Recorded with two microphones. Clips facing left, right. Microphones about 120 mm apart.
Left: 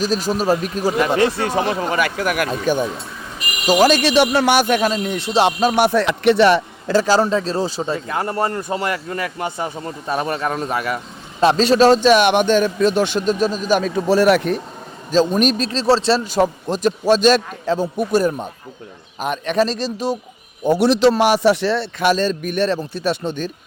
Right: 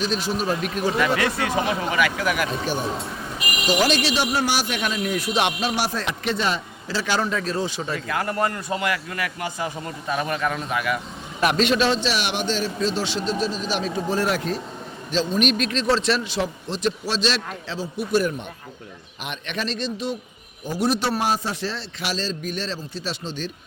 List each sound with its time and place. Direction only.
0.0 s a man's voice: 40° left (ahead or behind)
4.1 s a man's voice: 70° left (ahead or behind); by 4.8 s 55° left (ahead or behind)
4.8 s speech: 30° left (ahead or behind); by 6.9 s 70° left (ahead or behind)
7.0 s a man's voice: 35° left (ahead or behind)
14.1 s speech: 70° left (ahead or behind)
15.1 s a man's voice: 45° left (ahead or behind)
16.3 s a man's voice: 45° left (ahead or behind)
20.7 s a man's voice: 80° left; by 23.5 s 55° left (ahead or behind)